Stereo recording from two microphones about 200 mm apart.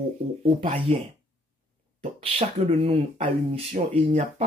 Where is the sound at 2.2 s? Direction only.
30° right (ahead or behind).